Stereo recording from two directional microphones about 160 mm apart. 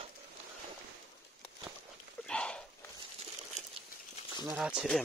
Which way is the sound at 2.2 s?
5° left (ahead or behind).